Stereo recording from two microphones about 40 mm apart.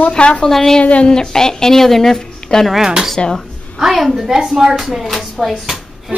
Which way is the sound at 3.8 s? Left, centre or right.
Centre.